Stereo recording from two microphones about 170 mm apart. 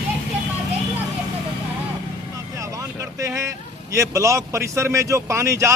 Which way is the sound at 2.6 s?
20° right (ahead or behind).